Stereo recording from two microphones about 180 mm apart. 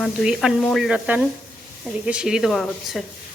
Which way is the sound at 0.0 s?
5° right (ahead or behind).